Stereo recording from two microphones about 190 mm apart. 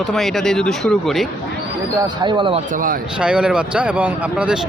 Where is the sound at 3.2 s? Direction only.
5° right (ahead or behind).